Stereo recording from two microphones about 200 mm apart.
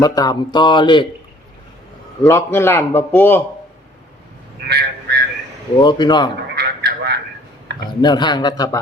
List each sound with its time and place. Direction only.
0.0 s speech: 20° left (ahead or behind)
2.2 s a man's voice: 15° left (ahead or behind)
4.7 s a sound: 55° right (ahead or behind)
5.8 s speech: 20° left (ahead or behind)
6.6 s a sound: 55° right (ahead or behind)
8.0 s speech: 20° left (ahead or behind)